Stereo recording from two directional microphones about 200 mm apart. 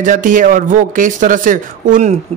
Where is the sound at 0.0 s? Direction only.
40° right (ahead or behind).